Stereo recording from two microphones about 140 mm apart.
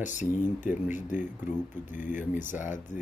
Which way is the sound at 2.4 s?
65° left (ahead or behind).